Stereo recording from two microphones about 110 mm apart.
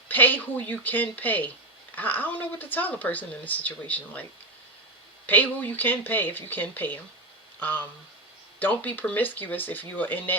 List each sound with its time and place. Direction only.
0.1 s speech: 15° left (ahead or behind)